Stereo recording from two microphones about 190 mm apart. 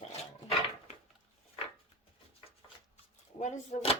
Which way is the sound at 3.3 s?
35° left (ahead or behind).